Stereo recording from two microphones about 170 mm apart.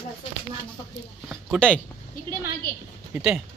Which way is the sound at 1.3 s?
5° left (ahead or behind).